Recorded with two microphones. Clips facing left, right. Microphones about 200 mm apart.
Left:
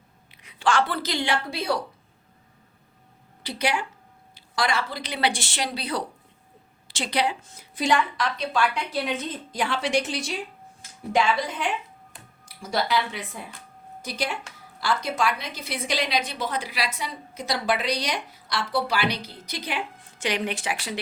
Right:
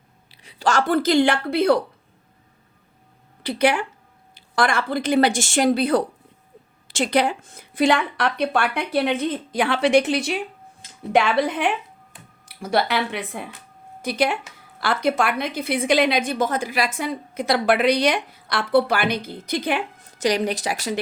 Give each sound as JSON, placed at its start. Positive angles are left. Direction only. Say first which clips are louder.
{"t": 0.3, "sound": "speech", "louder": "right 2 dB", "side_deg": -35}
{"t": 3.4, "sound": "a woman's voice", "louder": "right 7 dB", "side_deg": -55}
{"t": 20.1, "sound": "a woman's voice", "louder": "right 6 dB", "side_deg": -40}